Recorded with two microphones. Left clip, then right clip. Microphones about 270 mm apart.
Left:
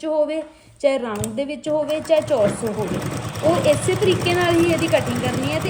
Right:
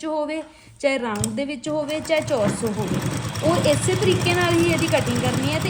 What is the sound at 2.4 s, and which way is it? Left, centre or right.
Speech, centre.